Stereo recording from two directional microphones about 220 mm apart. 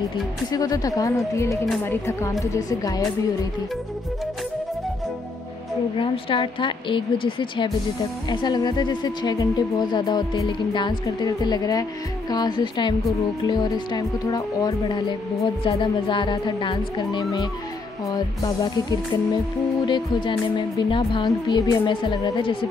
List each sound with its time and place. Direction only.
0.5 s speech: 15° left (ahead or behind)
5.9 s speech: 25° left (ahead or behind)